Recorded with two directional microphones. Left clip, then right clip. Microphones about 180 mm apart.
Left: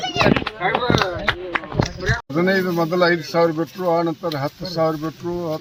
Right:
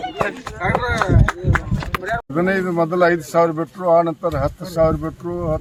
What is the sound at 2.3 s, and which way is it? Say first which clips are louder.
Speech: left 1 dB; 20° right (ahead or behind).